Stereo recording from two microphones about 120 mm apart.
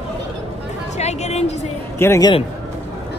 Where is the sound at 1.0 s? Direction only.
65° left (ahead or behind).